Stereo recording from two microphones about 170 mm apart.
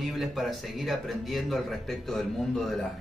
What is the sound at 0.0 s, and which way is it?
Speech, centre (ahead or behind).